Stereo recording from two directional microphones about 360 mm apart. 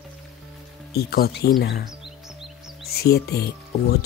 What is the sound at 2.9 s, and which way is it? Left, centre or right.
Speech, left.